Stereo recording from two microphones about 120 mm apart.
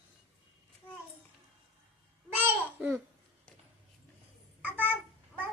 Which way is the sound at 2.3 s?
15° right (ahead or behind).